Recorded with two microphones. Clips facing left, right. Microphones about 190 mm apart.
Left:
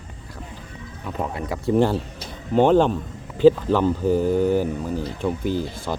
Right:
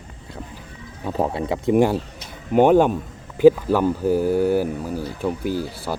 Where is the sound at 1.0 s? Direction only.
30° right (ahead or behind).